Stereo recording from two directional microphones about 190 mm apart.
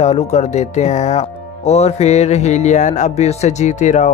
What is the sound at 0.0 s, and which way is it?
Speech, 35° left (ahead or behind).